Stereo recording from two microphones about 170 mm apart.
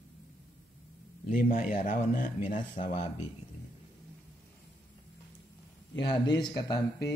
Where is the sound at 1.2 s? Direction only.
55° left (ahead or behind).